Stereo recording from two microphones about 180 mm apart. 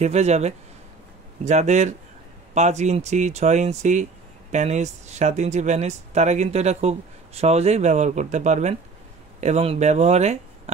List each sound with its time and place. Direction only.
0.0 s speech: 40° right (ahead or behind)